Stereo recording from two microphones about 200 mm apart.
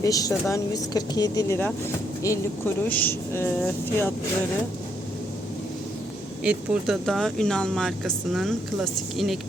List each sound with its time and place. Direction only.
0.0 s speech: 15° left (ahead or behind)
6.4 s speech: 5° right (ahead or behind)